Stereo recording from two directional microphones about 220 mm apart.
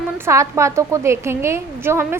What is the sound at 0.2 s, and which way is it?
A woman's voice, 15° right (ahead or behind).